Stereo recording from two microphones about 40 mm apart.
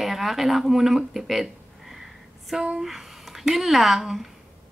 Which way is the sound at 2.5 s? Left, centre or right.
Centre.